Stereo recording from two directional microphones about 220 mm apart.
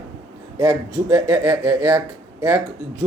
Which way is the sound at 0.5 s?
15° right (ahead or behind).